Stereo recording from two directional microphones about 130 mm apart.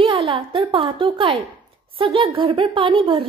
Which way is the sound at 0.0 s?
45° right (ahead or behind).